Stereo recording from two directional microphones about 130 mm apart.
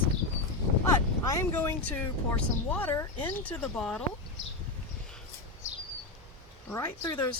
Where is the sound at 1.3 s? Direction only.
20° left (ahead or behind).